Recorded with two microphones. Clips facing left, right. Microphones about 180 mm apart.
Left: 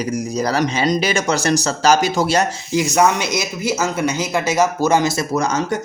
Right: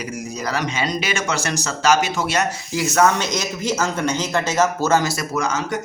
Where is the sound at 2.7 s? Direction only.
15° left (ahead or behind).